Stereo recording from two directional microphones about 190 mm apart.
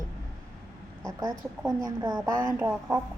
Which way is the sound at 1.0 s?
20° right (ahead or behind).